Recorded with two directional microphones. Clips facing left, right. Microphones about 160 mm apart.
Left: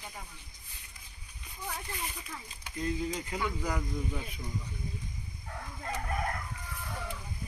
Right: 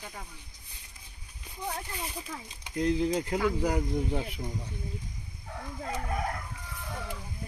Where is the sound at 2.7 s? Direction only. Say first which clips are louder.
Right 7 dB; 75° right (ahead or behind).